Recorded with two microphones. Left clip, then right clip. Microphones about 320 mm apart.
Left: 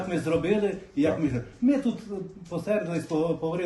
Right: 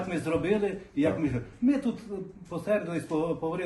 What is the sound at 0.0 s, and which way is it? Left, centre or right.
A man's voice, centre.